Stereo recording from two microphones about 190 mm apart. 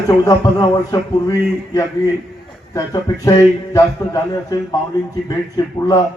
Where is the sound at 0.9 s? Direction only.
20° left (ahead or behind).